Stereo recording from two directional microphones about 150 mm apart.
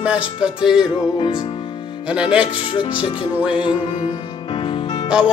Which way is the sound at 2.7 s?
35° left (ahead or behind).